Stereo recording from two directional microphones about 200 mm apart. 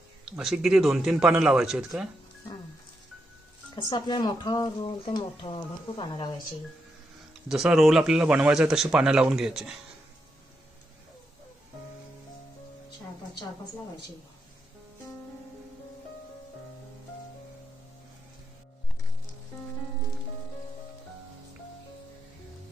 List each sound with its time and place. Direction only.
0.3 s speech: 5° right (ahead or behind)
3.8 s speech: 20° left (ahead or behind)
7.4 s speech: centre (ahead or behind)